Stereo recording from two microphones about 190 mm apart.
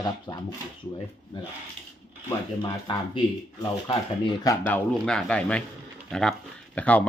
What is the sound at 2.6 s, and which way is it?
Speech, 20° left (ahead or behind).